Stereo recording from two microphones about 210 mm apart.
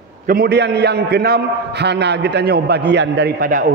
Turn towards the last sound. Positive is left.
turn(degrees=-45)  # may be behind; listen again after turning